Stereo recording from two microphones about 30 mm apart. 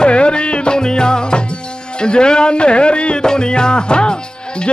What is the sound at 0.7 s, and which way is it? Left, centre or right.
Speech, left.